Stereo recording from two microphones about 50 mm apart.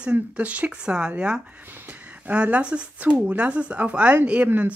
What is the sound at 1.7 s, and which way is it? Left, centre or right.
Speech, right.